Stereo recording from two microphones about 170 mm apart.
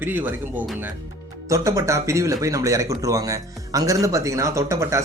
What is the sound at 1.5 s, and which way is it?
Speech, 20° right (ahead or behind).